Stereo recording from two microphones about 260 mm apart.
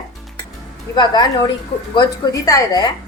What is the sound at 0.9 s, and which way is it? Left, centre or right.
A woman's voice, centre.